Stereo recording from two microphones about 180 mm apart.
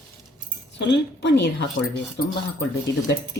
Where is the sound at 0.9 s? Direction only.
75° left (ahead or behind).